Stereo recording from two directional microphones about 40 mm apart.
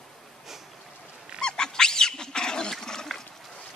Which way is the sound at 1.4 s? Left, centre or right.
Centre.